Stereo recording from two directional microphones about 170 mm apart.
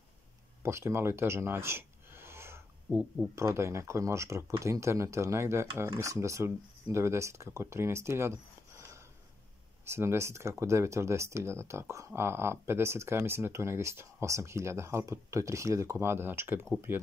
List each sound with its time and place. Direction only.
0.6 s speech: 15° right (ahead or behind)